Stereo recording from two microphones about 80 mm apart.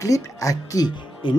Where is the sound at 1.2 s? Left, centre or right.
Left.